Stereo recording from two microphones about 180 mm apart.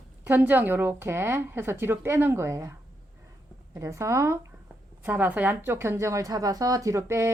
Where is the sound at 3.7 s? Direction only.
15° right (ahead or behind).